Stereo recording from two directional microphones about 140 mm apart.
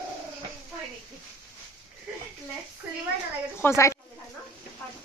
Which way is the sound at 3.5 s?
20° left (ahead or behind).